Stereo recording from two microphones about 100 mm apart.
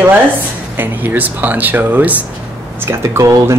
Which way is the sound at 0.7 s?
20° right (ahead or behind).